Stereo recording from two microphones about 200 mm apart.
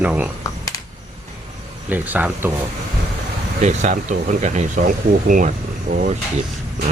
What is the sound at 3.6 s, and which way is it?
Speech, 35° right (ahead or behind).